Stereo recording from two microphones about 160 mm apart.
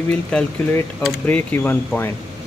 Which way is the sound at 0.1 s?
10° left (ahead or behind).